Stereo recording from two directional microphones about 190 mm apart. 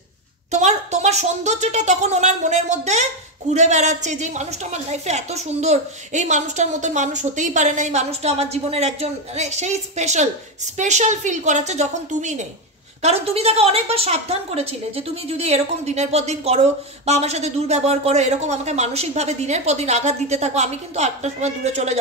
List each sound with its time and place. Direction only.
0.5 s a woman's voice: 35° right (ahead or behind)